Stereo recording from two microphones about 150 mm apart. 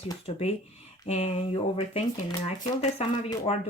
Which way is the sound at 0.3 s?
45° left (ahead or behind).